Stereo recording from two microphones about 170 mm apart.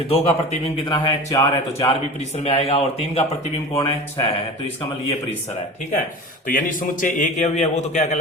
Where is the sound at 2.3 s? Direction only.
40° left (ahead or behind).